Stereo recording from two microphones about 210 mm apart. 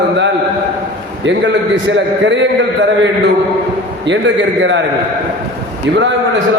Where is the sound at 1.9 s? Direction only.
60° right (ahead or behind).